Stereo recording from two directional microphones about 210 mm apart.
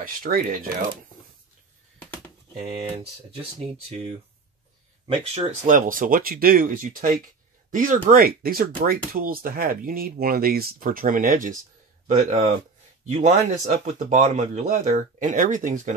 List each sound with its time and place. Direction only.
0.0 s speech: 45° right (ahead or behind)
5.0 s speech: 30° right (ahead or behind)